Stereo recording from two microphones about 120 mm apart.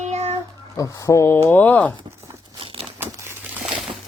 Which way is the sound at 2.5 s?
45° right (ahead or behind).